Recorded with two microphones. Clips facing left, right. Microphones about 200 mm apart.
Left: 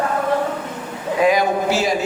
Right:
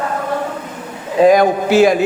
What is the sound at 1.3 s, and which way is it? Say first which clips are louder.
Speech: right 6 dB; 55° right (ahead or behind).